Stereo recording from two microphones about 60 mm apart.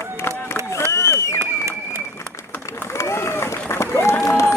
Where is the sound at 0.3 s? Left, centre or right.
Left.